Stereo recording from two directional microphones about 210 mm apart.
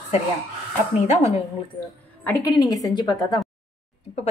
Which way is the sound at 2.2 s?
15° left (ahead or behind).